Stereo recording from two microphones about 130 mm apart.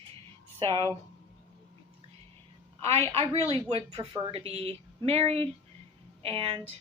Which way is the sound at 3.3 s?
50° right (ahead or behind).